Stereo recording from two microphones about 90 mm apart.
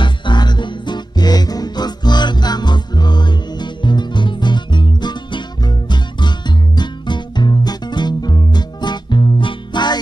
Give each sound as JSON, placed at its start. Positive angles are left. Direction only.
{"t": 0.0, "sound": "music", "side_deg": 60}